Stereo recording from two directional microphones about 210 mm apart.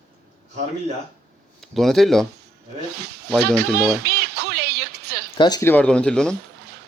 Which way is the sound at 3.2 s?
Centre (ahead or behind).